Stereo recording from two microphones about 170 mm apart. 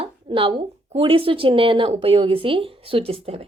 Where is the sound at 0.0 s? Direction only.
30° right (ahead or behind).